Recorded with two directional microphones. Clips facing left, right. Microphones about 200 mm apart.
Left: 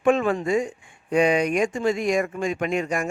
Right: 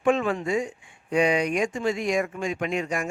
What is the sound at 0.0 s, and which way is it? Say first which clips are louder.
Speech: left 3 dB; 50° left (ahead or behind).